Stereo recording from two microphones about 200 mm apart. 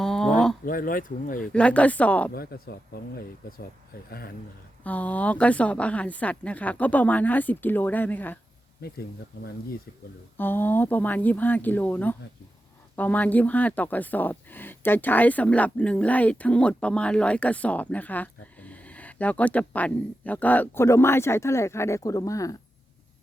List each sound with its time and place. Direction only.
0.0 s a sound: centre (ahead or behind)
0.6 s speech: 45° left (ahead or behind)
1.5 s speech: 5° left (ahead or behind)
2.3 s speech: 50° left (ahead or behind)
4.8 s speech: 5° left (ahead or behind)
8.8 s speech: 50° left (ahead or behind)
10.3 s speech: 10° left (ahead or behind)